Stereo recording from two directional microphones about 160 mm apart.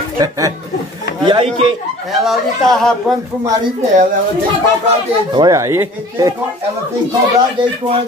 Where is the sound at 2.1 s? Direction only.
Centre (ahead or behind).